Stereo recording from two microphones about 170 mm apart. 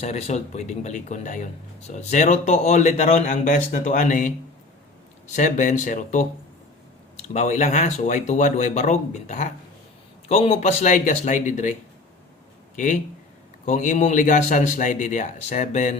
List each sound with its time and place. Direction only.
0.0 s speech: 40° left (ahead or behind)
5.3 s speech: 45° left (ahead or behind)
12.7 s speech: 45° left (ahead or behind)